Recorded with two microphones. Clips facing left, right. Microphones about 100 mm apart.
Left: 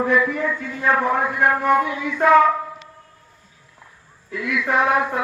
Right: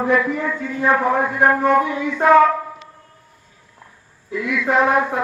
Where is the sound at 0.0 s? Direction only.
20° right (ahead or behind).